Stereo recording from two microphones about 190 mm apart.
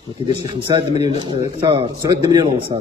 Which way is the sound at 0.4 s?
25° right (ahead or behind).